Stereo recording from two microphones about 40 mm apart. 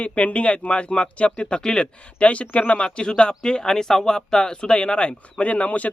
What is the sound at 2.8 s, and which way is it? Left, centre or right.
Speech, left.